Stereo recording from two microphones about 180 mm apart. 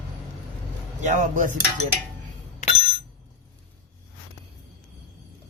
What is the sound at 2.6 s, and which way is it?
Bicycle bell, 45° left (ahead or behind).